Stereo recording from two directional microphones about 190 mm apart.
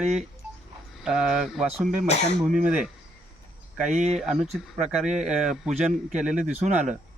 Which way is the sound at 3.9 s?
40° right (ahead or behind).